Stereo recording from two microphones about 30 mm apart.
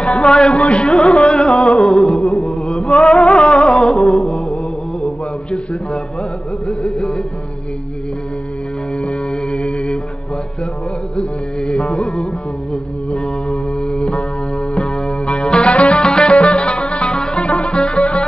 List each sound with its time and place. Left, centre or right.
0.2 s a man's voice: left
0.6 s music: left; by 2.1 s centre
2.1 s a sound: left
2.4 s a sound: left
3.0 s music: left
4.0 s mantra: centre
6.8 s music: left
9.3 s music: left
11.1 s music: left
13.1 s music: left
13.7 s music: left
16.0 s music: left
17.1 s music: left
17.4 s music: left